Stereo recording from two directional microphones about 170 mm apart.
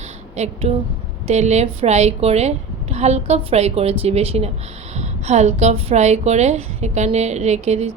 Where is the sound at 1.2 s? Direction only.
40° right (ahead or behind).